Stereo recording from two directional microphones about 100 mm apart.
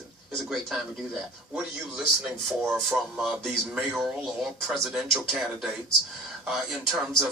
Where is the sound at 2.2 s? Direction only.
5° right (ahead or behind).